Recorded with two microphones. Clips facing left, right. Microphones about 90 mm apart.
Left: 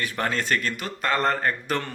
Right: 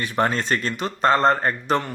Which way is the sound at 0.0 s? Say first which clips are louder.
Right 5 dB; 25° right (ahead or behind).